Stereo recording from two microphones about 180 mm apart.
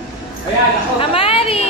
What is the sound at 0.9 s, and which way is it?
Chatter, 30° left (ahead or behind).